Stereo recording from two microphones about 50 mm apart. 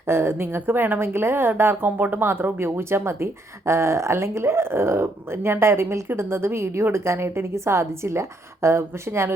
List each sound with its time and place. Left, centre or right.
0.1 s a woman's voice: right